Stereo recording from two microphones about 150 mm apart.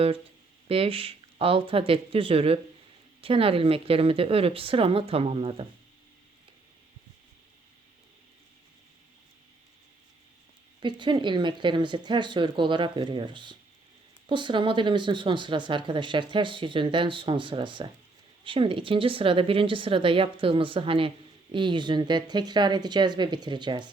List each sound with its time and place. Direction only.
0.7 s speech: 40° right (ahead or behind)
10.8 s speech: 30° right (ahead or behind)